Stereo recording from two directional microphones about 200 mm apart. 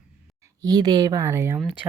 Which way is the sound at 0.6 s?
20° right (ahead or behind).